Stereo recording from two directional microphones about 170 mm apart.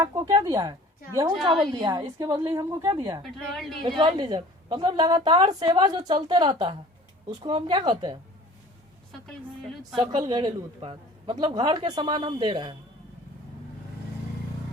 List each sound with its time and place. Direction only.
0.0 s a woman's voice: 25° right (ahead or behind)
3.3 s a woman's voice: centre (ahead or behind)
3.8 s a woman's voice: 25° right (ahead or behind)
10.0 s a woman's voice: 30° right (ahead or behind)